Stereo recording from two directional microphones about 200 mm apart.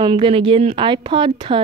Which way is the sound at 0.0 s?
25° right (ahead or behind).